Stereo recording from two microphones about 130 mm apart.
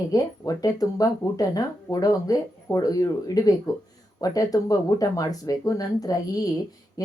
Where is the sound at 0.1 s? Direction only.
30° left (ahead or behind).